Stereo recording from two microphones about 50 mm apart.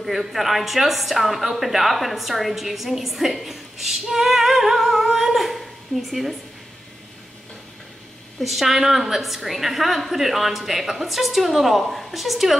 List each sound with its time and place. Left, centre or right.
0.0 s speech: centre
8.4 s speech: centre